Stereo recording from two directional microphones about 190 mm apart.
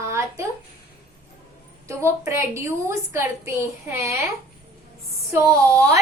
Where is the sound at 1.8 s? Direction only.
15° right (ahead or behind).